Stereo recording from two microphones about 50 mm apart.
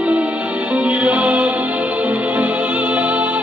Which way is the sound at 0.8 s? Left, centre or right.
Right.